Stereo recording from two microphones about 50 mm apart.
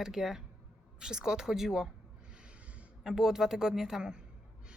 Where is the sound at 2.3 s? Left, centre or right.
Right.